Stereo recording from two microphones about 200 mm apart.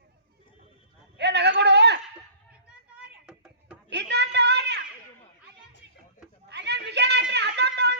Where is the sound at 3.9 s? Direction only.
60° right (ahead or behind).